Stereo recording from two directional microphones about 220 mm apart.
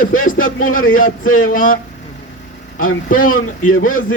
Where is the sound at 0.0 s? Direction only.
40° left (ahead or behind).